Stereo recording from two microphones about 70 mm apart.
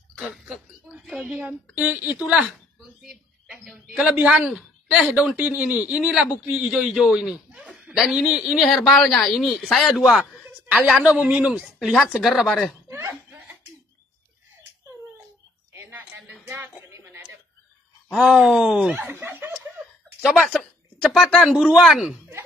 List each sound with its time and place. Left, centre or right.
0.2 s speech: centre
1.8 s a woman's voice: right
3.0 s a sound: centre
3.9 s speech: centre
10.4 s chuckle: right
11.1 s speech: centre
12.8 s chuckle: right
15.7 s a sound: right
18.1 s speech: centre
18.9 s speech: right
20.4 s speech: centre
21.8 s speech: centre